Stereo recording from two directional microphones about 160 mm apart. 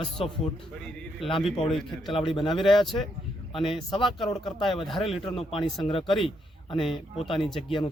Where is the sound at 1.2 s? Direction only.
35° left (ahead or behind).